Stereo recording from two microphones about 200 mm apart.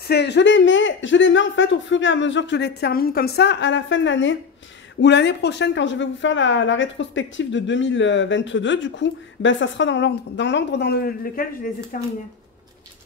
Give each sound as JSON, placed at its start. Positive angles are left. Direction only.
{"t": 0.0, "sound": "speech", "side_deg": 55}